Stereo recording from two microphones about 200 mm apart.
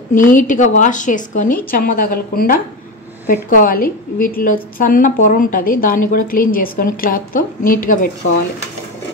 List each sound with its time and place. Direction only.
0.1 s a woman's voice: 40° left (ahead or behind)